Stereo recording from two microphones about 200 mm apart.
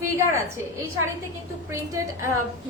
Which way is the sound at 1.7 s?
15° right (ahead or behind).